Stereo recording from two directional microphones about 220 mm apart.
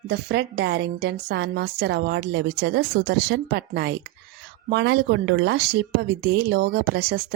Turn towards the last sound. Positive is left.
turn(degrees=-45)  # may be behind; listen again after turning